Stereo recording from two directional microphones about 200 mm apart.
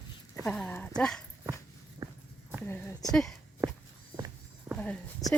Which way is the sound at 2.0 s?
15° right (ahead or behind).